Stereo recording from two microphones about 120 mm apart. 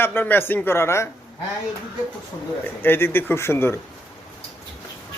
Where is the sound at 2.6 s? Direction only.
15° left (ahead or behind).